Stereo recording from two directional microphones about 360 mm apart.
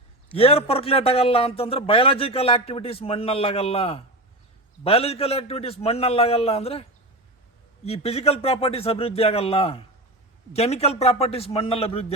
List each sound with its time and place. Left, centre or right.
0.3 s a man's voice: centre
7.9 s a man's voice: centre